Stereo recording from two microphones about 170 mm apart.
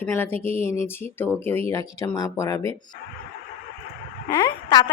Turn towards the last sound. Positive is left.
turn(degrees=20)  # may be behind; listen again after turning